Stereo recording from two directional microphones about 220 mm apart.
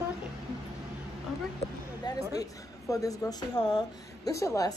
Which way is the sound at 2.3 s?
15° left (ahead or behind).